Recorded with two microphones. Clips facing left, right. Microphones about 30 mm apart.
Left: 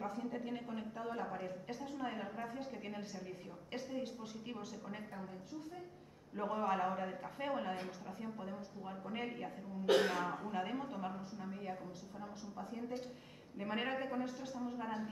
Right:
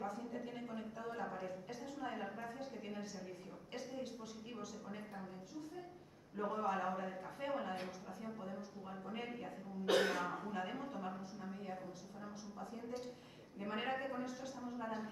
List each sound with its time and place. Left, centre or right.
0.0 s a woman's voice: centre
6.3 s a woman's voice: centre
10.5 s a woman's voice: centre